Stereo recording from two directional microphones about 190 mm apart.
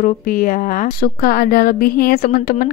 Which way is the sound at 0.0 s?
45° left (ahead or behind).